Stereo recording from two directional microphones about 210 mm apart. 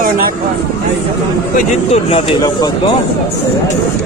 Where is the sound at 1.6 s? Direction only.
30° left (ahead or behind).